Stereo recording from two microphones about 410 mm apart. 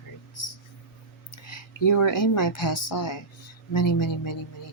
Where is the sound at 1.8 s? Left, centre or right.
Left.